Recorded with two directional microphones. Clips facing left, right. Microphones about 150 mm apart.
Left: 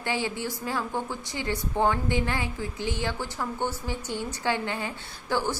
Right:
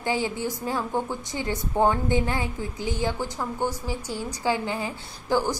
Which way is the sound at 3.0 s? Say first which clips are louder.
Right 3 dB; 15° right (ahead or behind).